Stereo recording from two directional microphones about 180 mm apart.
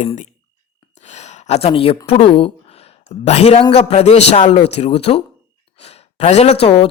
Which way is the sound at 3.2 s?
35° left (ahead or behind).